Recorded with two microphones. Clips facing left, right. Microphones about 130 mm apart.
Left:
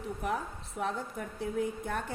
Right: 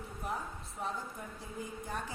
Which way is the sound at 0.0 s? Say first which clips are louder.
Left 6 dB; 70° left (ahead or behind).